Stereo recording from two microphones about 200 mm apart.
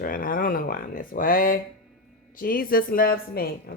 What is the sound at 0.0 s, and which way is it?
Speech, 45° left (ahead or behind).